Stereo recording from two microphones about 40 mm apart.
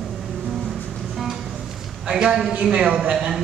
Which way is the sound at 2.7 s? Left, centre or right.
Right.